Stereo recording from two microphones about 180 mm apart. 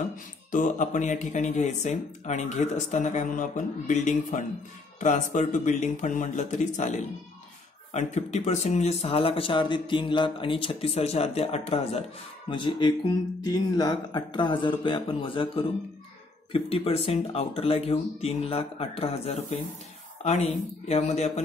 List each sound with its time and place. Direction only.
0.5 s speech: 45° left (ahead or behind)